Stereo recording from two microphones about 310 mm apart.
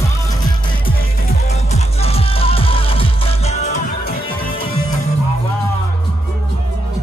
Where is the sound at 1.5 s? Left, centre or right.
Centre.